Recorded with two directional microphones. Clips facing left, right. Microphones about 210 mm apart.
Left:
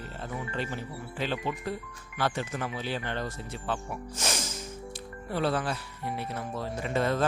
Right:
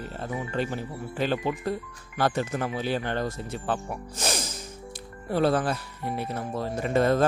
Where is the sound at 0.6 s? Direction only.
45° right (ahead or behind).